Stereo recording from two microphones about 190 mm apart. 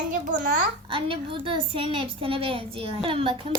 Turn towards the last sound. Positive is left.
turn(degrees=-30)  # may be behind; listen again after turning